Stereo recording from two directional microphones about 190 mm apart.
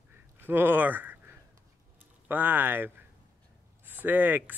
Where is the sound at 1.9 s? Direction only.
10° right (ahead or behind).